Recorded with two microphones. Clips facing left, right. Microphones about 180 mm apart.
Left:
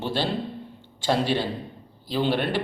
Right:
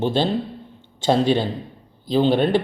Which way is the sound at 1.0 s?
25° right (ahead or behind).